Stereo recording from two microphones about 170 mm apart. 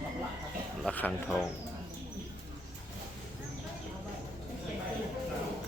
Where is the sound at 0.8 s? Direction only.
5° left (ahead or behind).